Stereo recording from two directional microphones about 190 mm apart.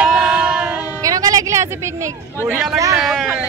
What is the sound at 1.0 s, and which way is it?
Speech, 20° right (ahead or behind).